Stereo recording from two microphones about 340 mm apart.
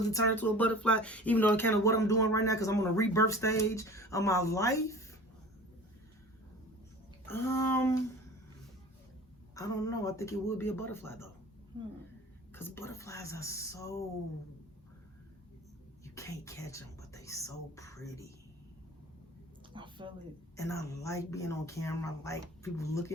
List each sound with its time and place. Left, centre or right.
0.1 s speech: centre
7.5 s a sound: left
9.6 s speech: centre
12.5 s speech: centre
16.1 s speech: centre
19.7 s a woman's voice: centre
20.6 s speech: centre